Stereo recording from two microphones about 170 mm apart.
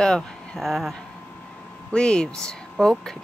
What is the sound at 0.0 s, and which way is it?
Speech, 5° left (ahead or behind).